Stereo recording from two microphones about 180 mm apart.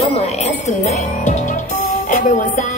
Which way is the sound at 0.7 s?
40° left (ahead or behind).